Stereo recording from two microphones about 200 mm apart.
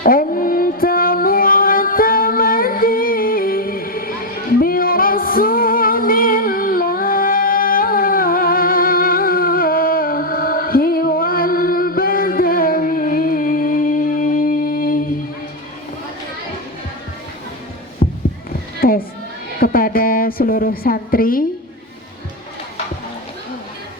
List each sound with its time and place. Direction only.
0.0 s music: 45° left (ahead or behind)
18.0 s heart sounds: 40° left (ahead or behind)
18.8 s a sound: 45° left (ahead or behind)